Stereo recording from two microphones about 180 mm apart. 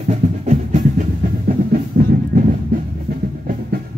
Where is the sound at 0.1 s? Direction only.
40° right (ahead or behind).